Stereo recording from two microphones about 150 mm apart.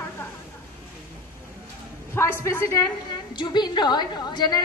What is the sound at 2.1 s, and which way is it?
A woman's voice, 15° left (ahead or behind).